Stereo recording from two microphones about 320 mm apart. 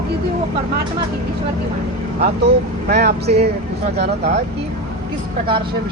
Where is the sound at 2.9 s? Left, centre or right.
Right.